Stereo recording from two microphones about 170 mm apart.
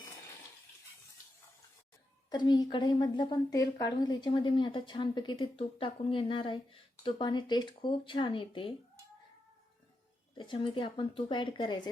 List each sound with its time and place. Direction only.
2.3 s a woman's voice: 25° left (ahead or behind)
10.3 s a woman's voice: 30° left (ahead or behind)